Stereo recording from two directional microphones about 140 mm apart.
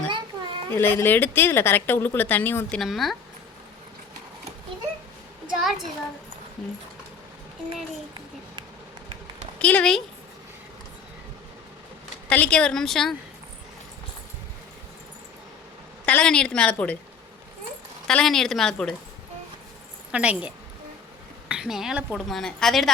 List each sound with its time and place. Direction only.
0.3 s a sound: 30° right (ahead or behind)
0.7 s speech: 15° left (ahead or behind)
5.5 s a sound: centre (ahead or behind)
9.6 s speech: 10° left (ahead or behind)
12.3 s a woman's voice: 10° left (ahead or behind)
16.0 s speech: 5° left (ahead or behind)
18.1 s a woman's voice: 5° left (ahead or behind)
20.1 s speech: 10° right (ahead or behind)
21.5 s a woman's voice: 5° right (ahead or behind)